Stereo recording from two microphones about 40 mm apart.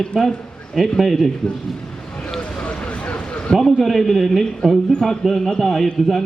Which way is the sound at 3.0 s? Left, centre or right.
Left.